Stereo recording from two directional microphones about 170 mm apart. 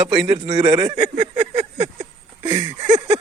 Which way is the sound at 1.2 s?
35° right (ahead or behind).